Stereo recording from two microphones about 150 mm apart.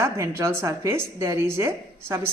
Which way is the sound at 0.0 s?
20° right (ahead or behind).